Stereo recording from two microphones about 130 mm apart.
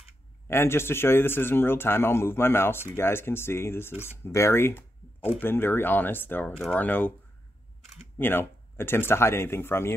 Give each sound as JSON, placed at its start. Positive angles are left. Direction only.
{"t": 0.5, "sound": "speech", "side_deg": 20}
{"t": 8.2, "sound": "speech", "side_deg": 15}